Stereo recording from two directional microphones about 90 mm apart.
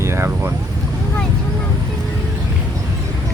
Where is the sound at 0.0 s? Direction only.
30° right (ahead or behind).